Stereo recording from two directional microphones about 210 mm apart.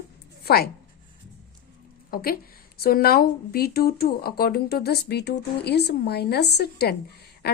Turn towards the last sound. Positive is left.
turn(degrees=50)  # may be behind; listen again after turning